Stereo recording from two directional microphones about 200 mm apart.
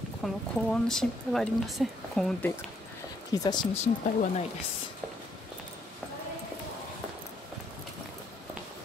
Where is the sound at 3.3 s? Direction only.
20° left (ahead or behind).